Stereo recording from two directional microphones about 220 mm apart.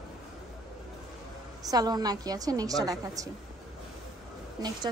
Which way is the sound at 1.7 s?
15° right (ahead or behind).